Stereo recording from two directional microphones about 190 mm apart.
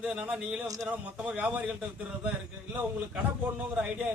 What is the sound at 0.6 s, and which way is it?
A man's voice, 20° right (ahead or behind).